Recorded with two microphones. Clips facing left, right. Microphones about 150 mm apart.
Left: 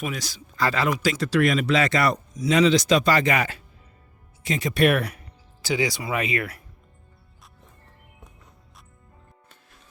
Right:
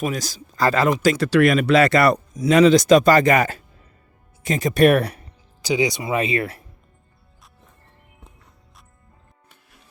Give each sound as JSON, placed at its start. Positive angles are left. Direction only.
{"t": 0.0, "sound": "a man's voice", "side_deg": -40}
{"t": 1.0, "sound": "a man's voice", "side_deg": -60}
{"t": 5.6, "sound": "speech", "side_deg": -20}